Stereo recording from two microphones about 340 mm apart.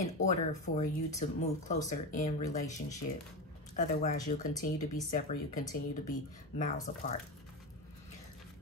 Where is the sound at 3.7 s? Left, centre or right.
Left.